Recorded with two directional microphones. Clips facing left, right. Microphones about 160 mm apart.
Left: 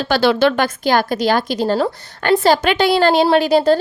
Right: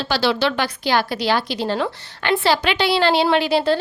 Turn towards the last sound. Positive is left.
turn(degrees=45)  # may be behind; listen again after turning